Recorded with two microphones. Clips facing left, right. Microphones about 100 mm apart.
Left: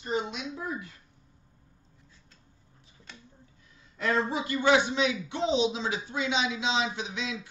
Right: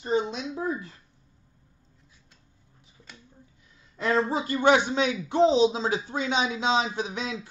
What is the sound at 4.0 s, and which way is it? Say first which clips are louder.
A man's voice: right 3 dB; 30° right (ahead or behind).